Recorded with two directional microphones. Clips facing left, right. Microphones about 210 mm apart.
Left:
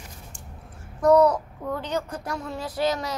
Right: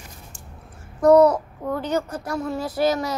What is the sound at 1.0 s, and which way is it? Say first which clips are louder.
Babbling: right 4 dB; 5° right (ahead or behind).